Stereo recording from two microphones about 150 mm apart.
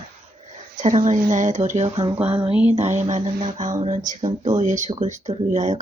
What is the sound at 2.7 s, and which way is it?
Speech, 45° right (ahead or behind).